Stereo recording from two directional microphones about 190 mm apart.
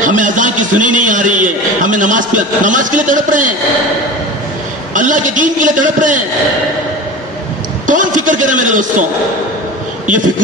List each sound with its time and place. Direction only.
0.0 s a man's voice: 45° right (ahead or behind)
4.9 s a man's voice: 45° right (ahead or behind)
7.8 s a man's voice: 45° right (ahead or behind)